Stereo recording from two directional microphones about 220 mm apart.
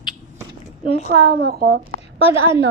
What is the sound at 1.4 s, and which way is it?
Speech, 45° right (ahead or behind).